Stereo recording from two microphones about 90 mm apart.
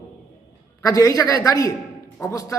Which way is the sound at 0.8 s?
40° left (ahead or behind).